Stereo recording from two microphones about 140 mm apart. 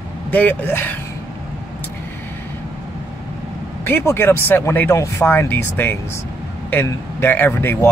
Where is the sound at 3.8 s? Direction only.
15° left (ahead or behind).